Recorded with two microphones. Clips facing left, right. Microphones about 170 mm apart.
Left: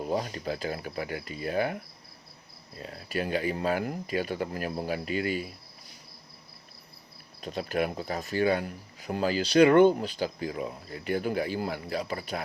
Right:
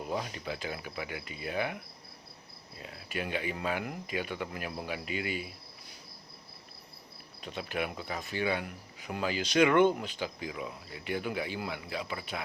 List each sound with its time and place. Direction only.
0.1 s speech: 40° left (ahead or behind)
7.4 s speech: 40° left (ahead or behind)